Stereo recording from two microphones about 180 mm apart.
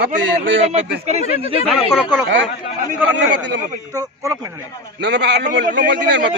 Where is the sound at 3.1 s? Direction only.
80° right.